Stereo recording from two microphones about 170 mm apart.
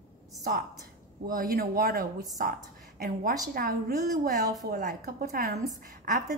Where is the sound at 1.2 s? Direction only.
60° right (ahead or behind).